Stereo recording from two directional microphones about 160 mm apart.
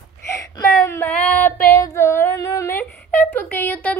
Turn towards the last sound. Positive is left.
turn(degrees=10)  # may be behind; listen again after turning